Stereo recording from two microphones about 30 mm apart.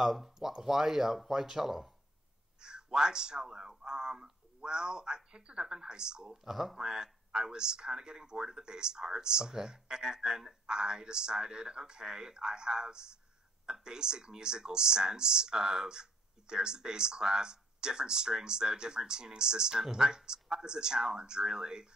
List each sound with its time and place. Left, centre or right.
0.0 s speech: centre
2.6 s speech: right
6.5 s speech: centre
6.8 s speech: right